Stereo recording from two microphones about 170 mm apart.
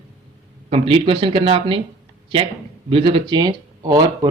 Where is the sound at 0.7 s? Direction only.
30° right (ahead or behind).